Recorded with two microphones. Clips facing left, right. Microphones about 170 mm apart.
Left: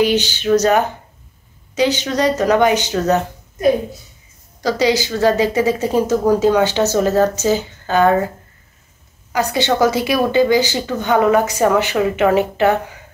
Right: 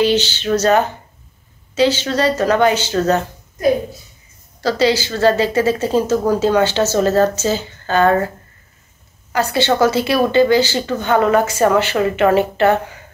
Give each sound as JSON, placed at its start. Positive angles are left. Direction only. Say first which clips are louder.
{"t": 0.0, "sound": "speech", "louder": "even", "side_deg": 15}
{"t": 4.6, "sound": "speech", "louder": "even", "side_deg": 15}
{"t": 9.3, "sound": "speech", "louder": "right 1 dB", "side_deg": 15}